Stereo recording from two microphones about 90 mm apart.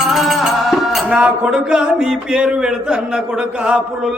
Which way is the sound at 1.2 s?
10° right (ahead or behind).